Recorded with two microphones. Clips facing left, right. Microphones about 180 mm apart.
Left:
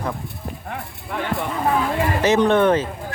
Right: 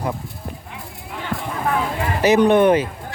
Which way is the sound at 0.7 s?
60° left (ahead or behind).